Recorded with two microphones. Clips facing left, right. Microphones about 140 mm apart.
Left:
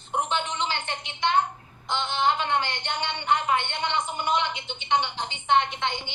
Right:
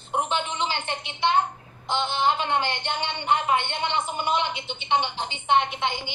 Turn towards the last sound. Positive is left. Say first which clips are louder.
# right 1 dB
turn(degrees=-15)  # may be behind; listen again after turning